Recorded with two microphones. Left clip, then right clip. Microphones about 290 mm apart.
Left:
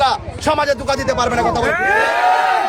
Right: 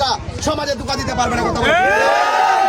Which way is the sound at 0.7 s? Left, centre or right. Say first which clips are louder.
Left 4 dB; centre.